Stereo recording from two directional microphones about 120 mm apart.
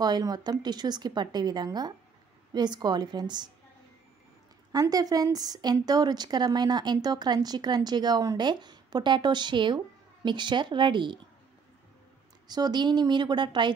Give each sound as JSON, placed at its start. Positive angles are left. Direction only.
{"t": 0.0, "sound": "a woman's voice", "side_deg": -35}
{"t": 4.7, "sound": "a woman's voice", "side_deg": -30}
{"t": 12.4, "sound": "a woman's voice", "side_deg": -35}